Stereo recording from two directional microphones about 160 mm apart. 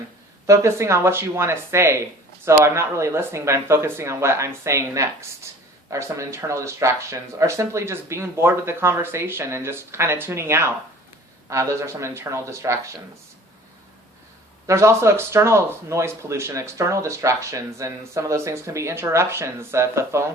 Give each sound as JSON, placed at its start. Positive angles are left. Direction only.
{"t": 0.4, "sound": "speech", "side_deg": -20}
{"t": 14.7, "sound": "speech", "side_deg": -15}